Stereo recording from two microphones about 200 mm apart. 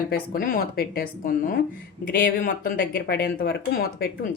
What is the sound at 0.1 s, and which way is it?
Speech, 45° left (ahead or behind).